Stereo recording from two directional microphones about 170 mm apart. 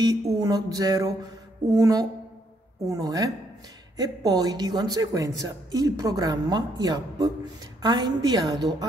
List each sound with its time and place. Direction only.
0.0 s speech: 20° right (ahead or behind)